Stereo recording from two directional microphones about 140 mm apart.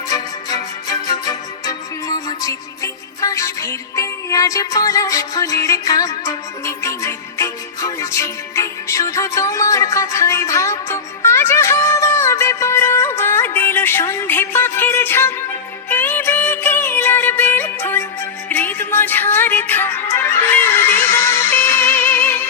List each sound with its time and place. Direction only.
0.1 s music: 25° left (ahead or behind)